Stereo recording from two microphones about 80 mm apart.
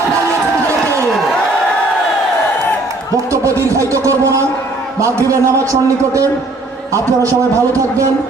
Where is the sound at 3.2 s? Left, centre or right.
Right.